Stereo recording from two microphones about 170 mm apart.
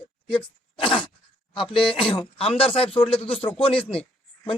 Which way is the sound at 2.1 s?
35° left (ahead or behind).